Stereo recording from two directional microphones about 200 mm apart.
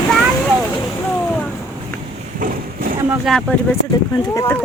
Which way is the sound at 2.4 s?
45° right (ahead or behind).